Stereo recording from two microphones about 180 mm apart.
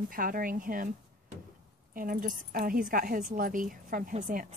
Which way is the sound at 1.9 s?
50° right (ahead or behind).